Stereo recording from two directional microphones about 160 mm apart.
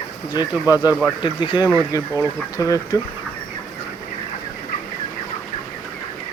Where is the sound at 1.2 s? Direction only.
30° left (ahead or behind).